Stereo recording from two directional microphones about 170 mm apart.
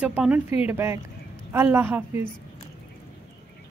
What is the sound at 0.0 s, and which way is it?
A woman's voice, 10° right (ahead or behind).